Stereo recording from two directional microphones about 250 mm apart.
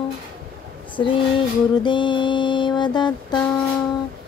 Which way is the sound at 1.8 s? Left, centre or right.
Centre.